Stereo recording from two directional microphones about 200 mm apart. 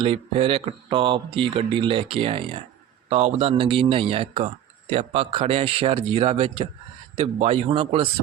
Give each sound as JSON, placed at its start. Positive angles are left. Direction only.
{"t": 0.0, "sound": "speech", "side_deg": -30}